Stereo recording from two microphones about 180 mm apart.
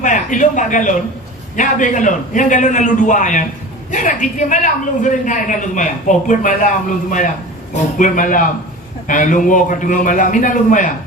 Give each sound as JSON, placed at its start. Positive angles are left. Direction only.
{"t": 0.0, "sound": "a man's voice", "side_deg": 45}
{"t": 7.9, "sound": "a man's voice", "side_deg": 45}